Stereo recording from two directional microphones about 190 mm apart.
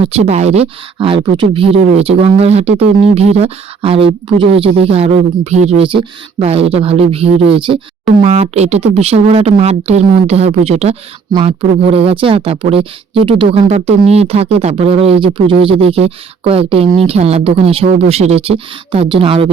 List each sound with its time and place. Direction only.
0.0 s speech: 35° right (ahead or behind)